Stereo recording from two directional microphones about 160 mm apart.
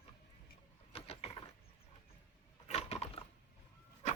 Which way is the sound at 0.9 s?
40° left (ahead or behind).